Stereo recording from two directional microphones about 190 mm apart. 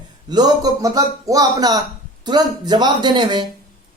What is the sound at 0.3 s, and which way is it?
Speech, 20° right (ahead or behind).